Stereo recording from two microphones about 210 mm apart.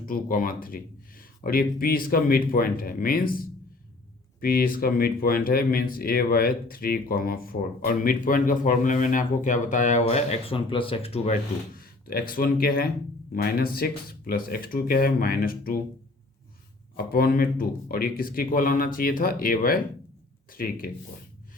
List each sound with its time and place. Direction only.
0.0 s speech: 40° left (ahead or behind)
11.8 s speech: 45° left (ahead or behind)
17.1 s speech: 45° left (ahead or behind)